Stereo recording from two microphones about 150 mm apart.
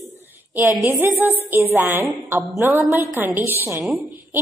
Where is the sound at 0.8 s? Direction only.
15° right (ahead or behind).